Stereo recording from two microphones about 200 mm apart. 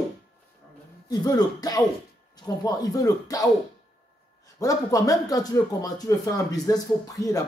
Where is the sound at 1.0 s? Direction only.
20° left (ahead or behind).